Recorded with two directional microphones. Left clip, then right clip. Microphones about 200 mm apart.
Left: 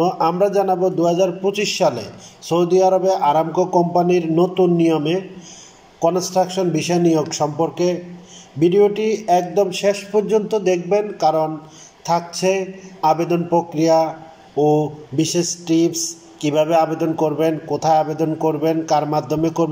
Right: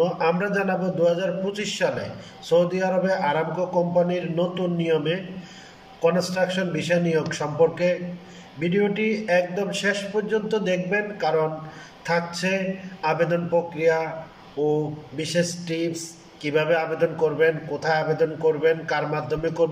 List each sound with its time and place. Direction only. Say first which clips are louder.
0.0 s a man's voice: left 5 dB; 30° left (ahead or behind)
12.4 s a man's voice: left 6 dB; 30° left (ahead or behind)